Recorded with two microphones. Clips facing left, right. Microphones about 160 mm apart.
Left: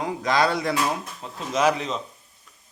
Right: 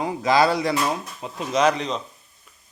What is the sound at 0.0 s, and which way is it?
Speech, 5° right (ahead or behind).